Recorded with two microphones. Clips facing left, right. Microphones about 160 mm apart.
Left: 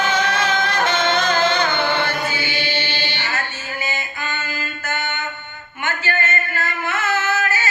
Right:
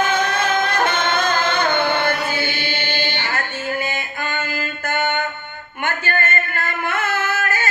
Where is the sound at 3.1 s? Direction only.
55° right (ahead or behind).